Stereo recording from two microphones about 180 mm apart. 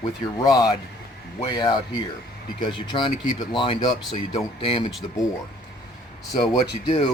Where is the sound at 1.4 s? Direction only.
25° left (ahead or behind).